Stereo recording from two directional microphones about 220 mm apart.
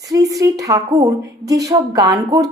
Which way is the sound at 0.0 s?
15° right (ahead or behind).